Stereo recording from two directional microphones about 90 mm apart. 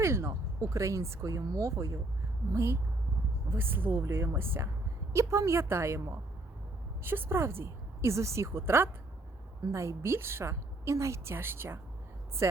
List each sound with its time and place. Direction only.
0.0 s a woman's voice: 30° right (ahead or behind)